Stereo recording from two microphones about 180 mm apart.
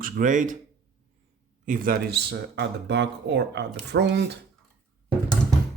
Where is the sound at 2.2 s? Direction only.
70° right (ahead or behind).